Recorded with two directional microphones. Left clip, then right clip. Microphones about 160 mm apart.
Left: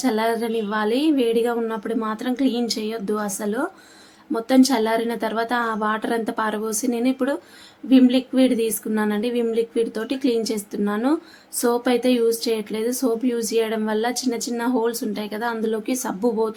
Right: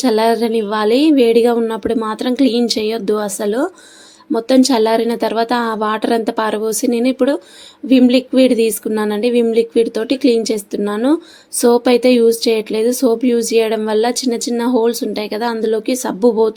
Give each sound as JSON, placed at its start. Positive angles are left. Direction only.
{"t": 0.0, "sound": "a woman's voice", "side_deg": -35}